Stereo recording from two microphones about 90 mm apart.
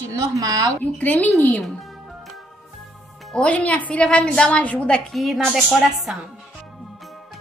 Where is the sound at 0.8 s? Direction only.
20° left (ahead or behind).